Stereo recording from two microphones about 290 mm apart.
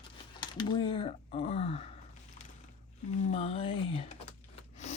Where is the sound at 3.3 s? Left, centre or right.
Centre.